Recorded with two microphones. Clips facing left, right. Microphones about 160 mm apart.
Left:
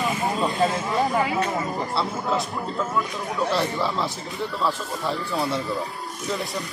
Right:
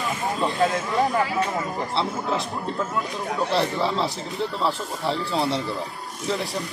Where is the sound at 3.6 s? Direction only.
25° right (ahead or behind).